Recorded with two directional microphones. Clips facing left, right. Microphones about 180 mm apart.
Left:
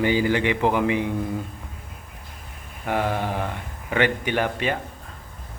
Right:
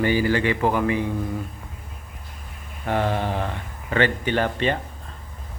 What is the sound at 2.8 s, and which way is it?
Speech, 10° left (ahead or behind).